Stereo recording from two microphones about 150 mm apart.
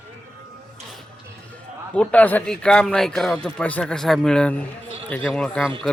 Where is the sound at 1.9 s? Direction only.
10° left (ahead or behind).